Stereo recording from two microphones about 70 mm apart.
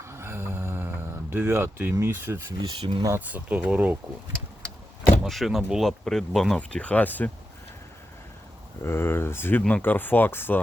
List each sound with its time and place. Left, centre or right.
0.0 s a sound: right
1.5 s speech: right
2.5 s speech: right
3.2 s speech: right
5.3 s speech: centre
6.6 s speech: centre
8.8 s speech: left